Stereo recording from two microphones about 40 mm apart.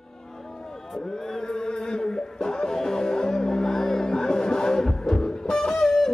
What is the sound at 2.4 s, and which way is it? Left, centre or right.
Music, centre.